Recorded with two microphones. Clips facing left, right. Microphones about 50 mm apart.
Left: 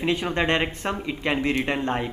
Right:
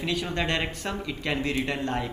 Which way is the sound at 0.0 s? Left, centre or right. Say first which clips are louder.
Left 5 dB; left.